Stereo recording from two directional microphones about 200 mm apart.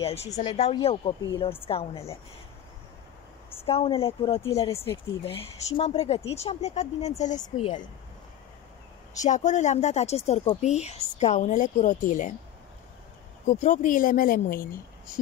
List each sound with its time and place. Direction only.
0.0 s a woman's voice: 30° left (ahead or behind)
3.6 s speech: 30° left (ahead or behind)
4.4 s speech: 15° left (ahead or behind)
5.2 s speech: 30° left (ahead or behind)
9.2 s speech: 35° left (ahead or behind)
13.5 s speech: 40° left (ahead or behind)